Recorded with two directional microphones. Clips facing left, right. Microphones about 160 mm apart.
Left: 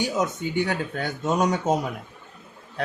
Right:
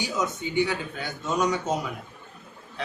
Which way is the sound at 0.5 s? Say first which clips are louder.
Left 1 dB; 50° left (ahead or behind).